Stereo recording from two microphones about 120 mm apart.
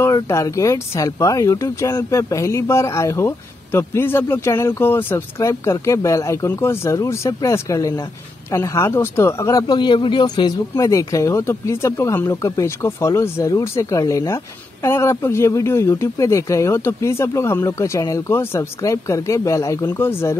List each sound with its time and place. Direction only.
0.0 s speech: 25° left (ahead or behind)